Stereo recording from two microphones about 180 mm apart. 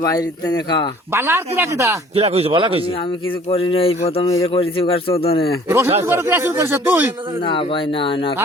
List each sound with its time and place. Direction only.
0.0 s speech: 20° left (ahead or behind)
1.1 s speech: 15° right (ahead or behind)
2.1 s speech: 35° right (ahead or behind)
3.5 s speech: 30° left (ahead or behind)
5.6 s speech: 15° right (ahead or behind)
7.4 s speech: 30° left (ahead or behind)